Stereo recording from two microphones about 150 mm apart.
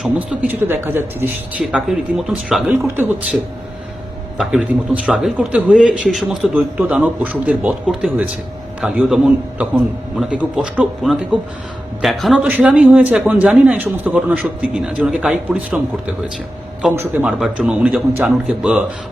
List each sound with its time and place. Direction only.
0.0 s a man's voice: 10° right (ahead or behind)
1.6 s a man's voice: centre (ahead or behind)
5.0 s a man's voice: 5° right (ahead or behind)
16.9 s a man's voice: 15° right (ahead or behind)
17.2 s a man's voice: 5° right (ahead or behind)